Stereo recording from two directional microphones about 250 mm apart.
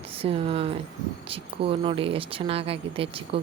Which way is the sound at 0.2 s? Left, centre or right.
Right.